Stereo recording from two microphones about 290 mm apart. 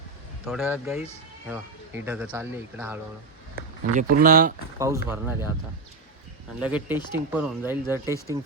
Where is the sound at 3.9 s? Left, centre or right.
Right.